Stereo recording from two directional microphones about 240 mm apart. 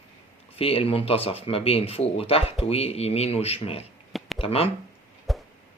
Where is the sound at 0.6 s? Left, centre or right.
Left.